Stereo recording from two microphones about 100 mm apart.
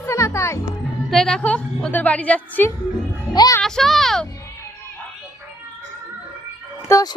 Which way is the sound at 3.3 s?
40° left (ahead or behind).